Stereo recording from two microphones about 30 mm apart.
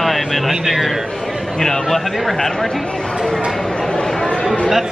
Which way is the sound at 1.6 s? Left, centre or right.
Centre.